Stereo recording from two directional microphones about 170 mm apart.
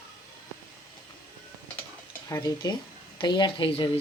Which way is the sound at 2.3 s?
20° left (ahead or behind).